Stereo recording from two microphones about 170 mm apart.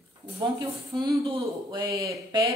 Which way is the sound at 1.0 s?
25° right (ahead or behind).